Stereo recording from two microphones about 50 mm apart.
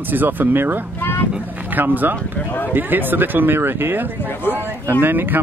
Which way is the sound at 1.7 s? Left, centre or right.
Right.